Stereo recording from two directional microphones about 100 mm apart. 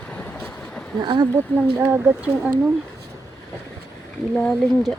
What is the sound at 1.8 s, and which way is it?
Speech, 15° right (ahead or behind).